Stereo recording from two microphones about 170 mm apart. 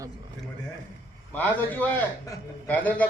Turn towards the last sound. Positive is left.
turn(degrees=10)  # may be behind; listen again after turning